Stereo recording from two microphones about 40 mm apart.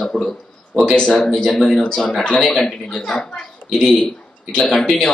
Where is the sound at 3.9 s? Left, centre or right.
Left.